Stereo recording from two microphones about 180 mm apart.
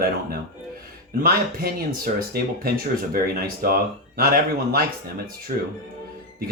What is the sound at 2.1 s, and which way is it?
Speech, 60° right (ahead or behind).